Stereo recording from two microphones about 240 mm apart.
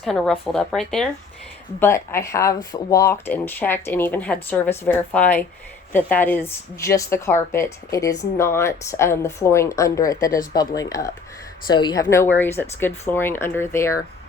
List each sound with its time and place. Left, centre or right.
0.0 s speech: centre